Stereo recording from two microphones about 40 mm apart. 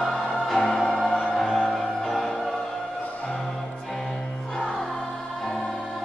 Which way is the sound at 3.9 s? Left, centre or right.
Centre.